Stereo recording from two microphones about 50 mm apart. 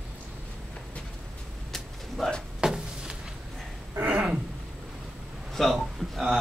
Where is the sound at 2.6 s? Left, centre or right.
Centre.